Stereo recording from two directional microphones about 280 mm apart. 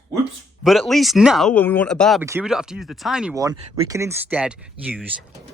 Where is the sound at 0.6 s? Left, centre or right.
Centre.